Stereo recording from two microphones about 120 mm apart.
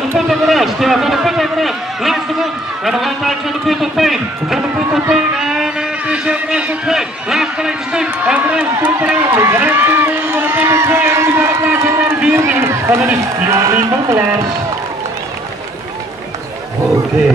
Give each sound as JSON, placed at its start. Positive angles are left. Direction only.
{"t": 0.3, "sound": "run", "side_deg": 0}
{"t": 5.5, "sound": "a sound", "side_deg": -5}
{"t": 8.7, "sound": "run", "side_deg": -15}
{"t": 12.4, "sound": "run", "side_deg": -20}